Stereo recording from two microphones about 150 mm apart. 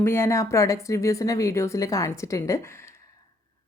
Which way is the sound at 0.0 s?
15° left (ahead or behind).